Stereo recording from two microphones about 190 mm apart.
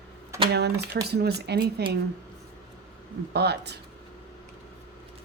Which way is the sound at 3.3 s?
60° right (ahead or behind).